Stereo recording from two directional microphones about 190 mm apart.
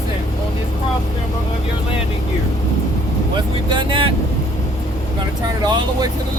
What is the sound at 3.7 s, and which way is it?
Vehicle, 25° right (ahead or behind).